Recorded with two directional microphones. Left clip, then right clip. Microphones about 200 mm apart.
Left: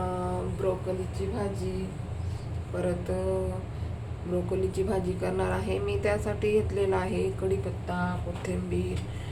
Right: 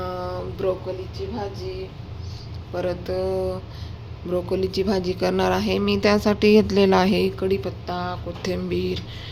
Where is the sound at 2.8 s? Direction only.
50° right (ahead or behind).